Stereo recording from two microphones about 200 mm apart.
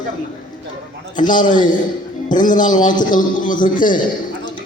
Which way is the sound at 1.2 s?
40° left (ahead or behind).